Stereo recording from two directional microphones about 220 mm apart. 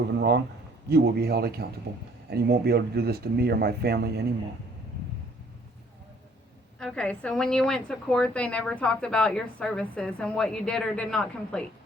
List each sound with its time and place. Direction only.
0.2 s speech: 50° right (ahead or behind)
6.7 s a woman's voice: 5° left (ahead or behind)